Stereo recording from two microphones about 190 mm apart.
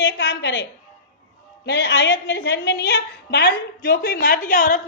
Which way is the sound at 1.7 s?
60° left (ahead or behind).